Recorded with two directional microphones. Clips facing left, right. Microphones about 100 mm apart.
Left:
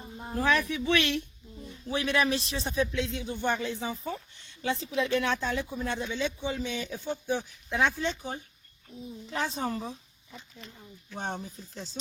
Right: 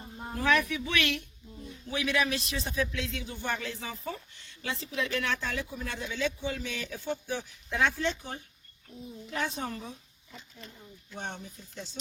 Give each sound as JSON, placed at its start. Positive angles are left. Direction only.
{"t": 0.3, "sound": "a woman's voice", "side_deg": 35}
{"t": 9.2, "sound": "a woman's voice", "side_deg": 30}